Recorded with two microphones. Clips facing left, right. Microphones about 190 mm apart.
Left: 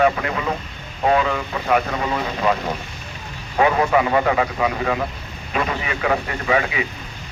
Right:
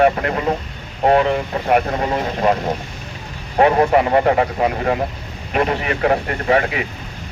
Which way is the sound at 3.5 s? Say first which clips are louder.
Right 3 dB; 45° right (ahead or behind).